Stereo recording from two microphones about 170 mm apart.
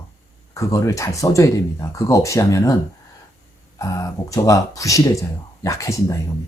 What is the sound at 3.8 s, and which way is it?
Speech, 20° left (ahead or behind).